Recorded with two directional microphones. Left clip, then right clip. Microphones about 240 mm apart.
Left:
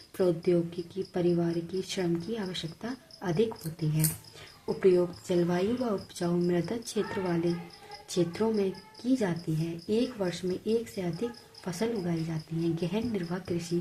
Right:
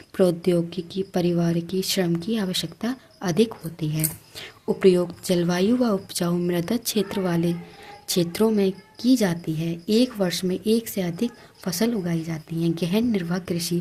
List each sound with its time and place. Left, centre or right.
0.2 s a woman's voice: right